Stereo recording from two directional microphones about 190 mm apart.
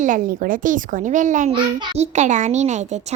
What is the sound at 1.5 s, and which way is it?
Speech, 30° right (ahead or behind).